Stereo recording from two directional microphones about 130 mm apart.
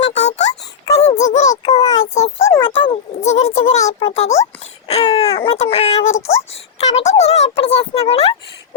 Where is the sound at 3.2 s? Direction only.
55° left (ahead or behind).